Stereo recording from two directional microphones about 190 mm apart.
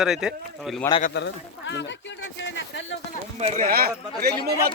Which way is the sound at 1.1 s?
70° left (ahead or behind).